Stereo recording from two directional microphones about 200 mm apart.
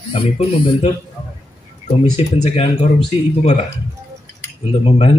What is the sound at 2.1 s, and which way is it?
Speech, 30° left (ahead or behind).